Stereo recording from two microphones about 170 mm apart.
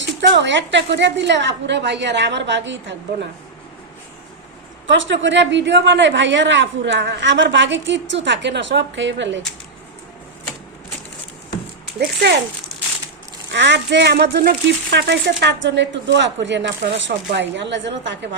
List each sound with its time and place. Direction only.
0.0 s speech: 90° right
4.9 s speech: 90° right
13.5 s speech: 90° right